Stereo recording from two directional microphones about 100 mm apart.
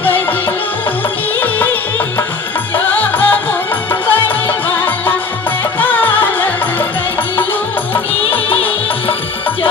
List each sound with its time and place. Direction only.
0.0 s music: 20° left (ahead or behind)
1.4 s music: 20° left (ahead or behind)
8.2 s music: 75° left (ahead or behind)